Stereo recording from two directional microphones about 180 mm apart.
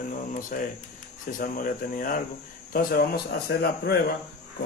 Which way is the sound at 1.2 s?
50° left (ahead or behind).